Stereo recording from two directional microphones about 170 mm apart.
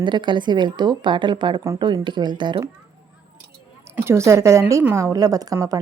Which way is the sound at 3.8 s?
15° right (ahead or behind).